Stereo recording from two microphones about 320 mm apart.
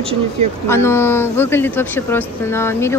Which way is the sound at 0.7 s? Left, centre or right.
Centre.